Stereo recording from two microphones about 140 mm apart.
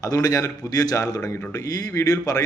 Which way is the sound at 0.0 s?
25° left (ahead or behind).